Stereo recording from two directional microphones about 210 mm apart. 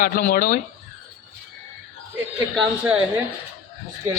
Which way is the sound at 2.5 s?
5° right (ahead or behind).